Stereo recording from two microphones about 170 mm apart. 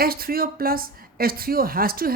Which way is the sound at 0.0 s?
60° right (ahead or behind).